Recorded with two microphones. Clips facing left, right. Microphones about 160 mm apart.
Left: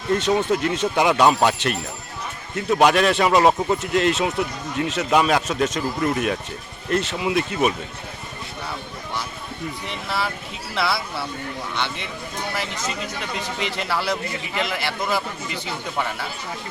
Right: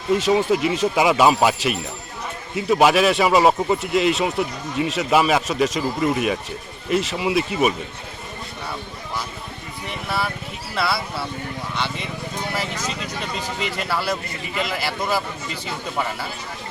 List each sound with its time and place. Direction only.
0.1 s speech: centre (ahead or behind)
10.8 s speech: 5° right (ahead or behind)
13.8 s speech: 5° right (ahead or behind)